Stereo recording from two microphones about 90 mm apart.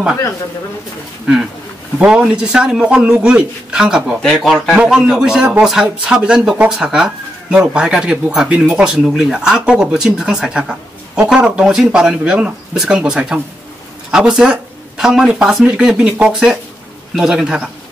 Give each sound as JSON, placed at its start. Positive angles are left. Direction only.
{"t": 1.2, "sound": "speech", "side_deg": -5}
{"t": 4.2, "sound": "speech", "side_deg": 5}
{"t": 4.7, "sound": "speech", "side_deg": -10}